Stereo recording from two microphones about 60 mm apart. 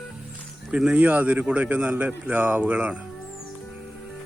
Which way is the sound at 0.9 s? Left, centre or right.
Right.